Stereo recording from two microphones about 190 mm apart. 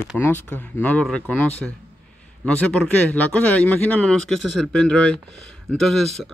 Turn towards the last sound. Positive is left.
turn(degrees=0)  # may be behind; listen again after turning